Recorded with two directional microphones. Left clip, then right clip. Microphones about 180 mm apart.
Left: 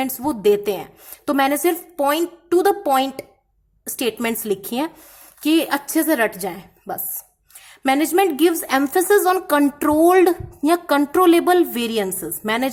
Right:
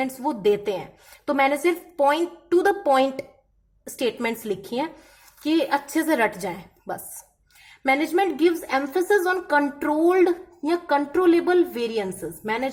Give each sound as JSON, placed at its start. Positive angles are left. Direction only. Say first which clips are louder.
{"t": 0.0, "sound": "a woman's voice", "louder": "left 4 dB", "side_deg": 25}
{"t": 7.9, "sound": "a woman's voice", "louder": "left 4 dB", "side_deg": 30}